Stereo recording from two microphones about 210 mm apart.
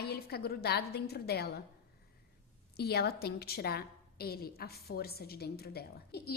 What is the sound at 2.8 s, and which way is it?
A woman's voice, 50° left (ahead or behind).